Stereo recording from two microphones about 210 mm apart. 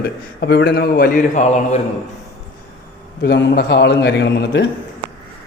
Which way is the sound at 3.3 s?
55° left (ahead or behind).